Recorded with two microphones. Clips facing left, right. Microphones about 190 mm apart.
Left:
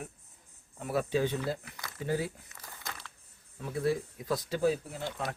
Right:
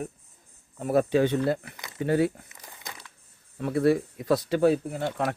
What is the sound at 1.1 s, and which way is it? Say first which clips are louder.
Speech: right 7 dB; 70° right (ahead or behind).